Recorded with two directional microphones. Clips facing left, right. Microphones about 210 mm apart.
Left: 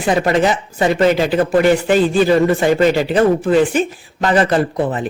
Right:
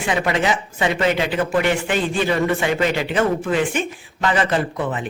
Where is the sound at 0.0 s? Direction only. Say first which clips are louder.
Left 6 dB; 40° left (ahead or behind).